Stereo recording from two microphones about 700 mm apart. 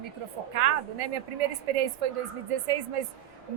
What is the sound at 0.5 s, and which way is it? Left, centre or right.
Speech, right.